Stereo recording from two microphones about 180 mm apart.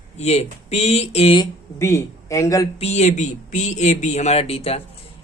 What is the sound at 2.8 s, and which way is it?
Speech, 40° left (ahead or behind).